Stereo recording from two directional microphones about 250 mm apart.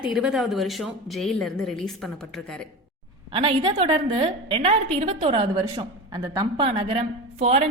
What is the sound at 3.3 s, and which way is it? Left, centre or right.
A woman's voice, centre.